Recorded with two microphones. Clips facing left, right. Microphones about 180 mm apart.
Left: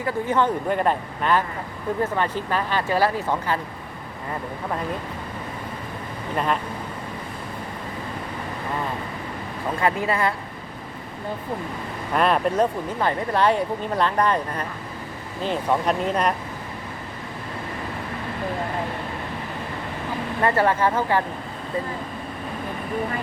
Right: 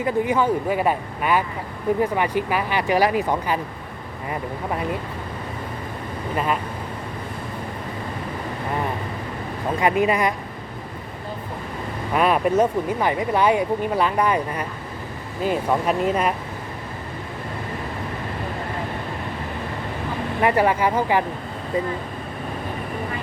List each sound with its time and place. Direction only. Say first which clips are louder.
0.0 s speech: right 2 dB; 10° right (ahead or behind)
6.3 s speech: even; 5° right (ahead or behind)
9.8 s speech: right 3 dB; 15° right (ahead or behind)
12.1 s speech: right 2 dB; 5° right (ahead or behind)
20.4 s speech: right 1 dB; 15° right (ahead or behind)